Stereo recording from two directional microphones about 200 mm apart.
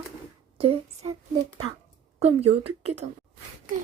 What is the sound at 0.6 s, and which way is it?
Speech, 25° right (ahead or behind).